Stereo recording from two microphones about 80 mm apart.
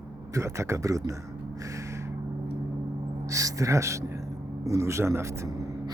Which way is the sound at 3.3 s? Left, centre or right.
Right.